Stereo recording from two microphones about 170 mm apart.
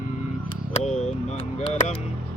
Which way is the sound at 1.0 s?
40° left (ahead or behind).